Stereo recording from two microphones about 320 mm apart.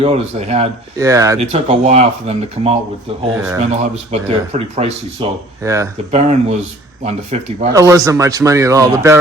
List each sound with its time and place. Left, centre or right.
0.0 s speech: centre
6.1 s speech: right